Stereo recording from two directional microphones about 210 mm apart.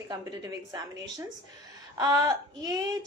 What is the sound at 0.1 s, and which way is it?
Speech, 20° right (ahead or behind).